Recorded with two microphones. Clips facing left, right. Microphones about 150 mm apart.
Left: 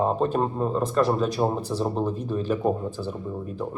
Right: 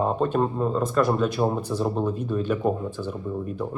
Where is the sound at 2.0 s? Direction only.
35° left (ahead or behind).